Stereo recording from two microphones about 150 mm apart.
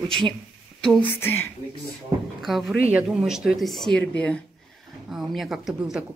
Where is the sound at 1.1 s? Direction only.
15° left (ahead or behind).